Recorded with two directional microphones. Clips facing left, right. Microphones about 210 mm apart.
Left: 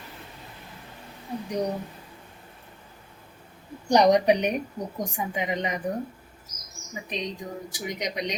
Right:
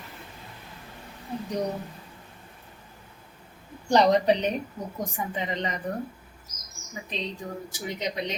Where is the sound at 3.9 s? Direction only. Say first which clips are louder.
Left 1 dB; 15° left (ahead or behind).